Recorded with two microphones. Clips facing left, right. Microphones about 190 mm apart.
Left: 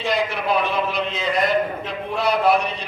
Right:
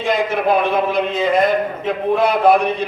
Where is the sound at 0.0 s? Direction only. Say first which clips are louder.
Right 5 dB; 50° right (ahead or behind).